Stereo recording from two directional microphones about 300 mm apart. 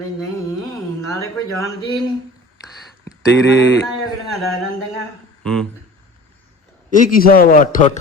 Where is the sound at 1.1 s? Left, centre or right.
Centre.